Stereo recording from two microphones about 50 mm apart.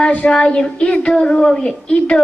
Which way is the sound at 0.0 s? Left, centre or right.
Left.